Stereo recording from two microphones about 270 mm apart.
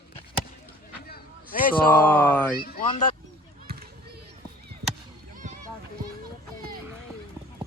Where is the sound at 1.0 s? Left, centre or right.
Left.